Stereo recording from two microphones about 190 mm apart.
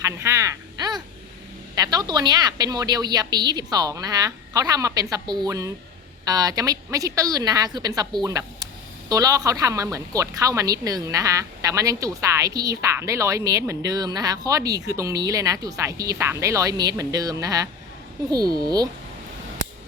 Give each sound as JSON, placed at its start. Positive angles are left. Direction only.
{"t": 0.0, "sound": "a woman's voice", "side_deg": -15}